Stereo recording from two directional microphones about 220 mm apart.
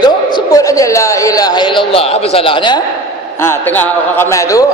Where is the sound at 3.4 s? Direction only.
10° left (ahead or behind).